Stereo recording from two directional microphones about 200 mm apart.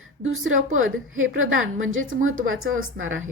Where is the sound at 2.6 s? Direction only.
80° right.